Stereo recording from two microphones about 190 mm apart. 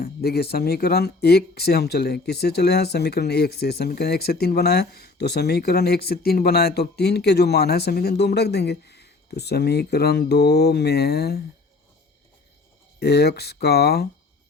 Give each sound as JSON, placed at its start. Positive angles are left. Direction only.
{"t": 0.0, "sound": "speech", "side_deg": 55}
{"t": 13.0, "sound": "speech", "side_deg": 60}